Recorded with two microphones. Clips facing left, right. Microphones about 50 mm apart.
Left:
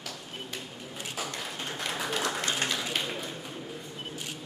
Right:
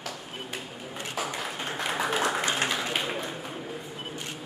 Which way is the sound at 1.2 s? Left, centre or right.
Centre.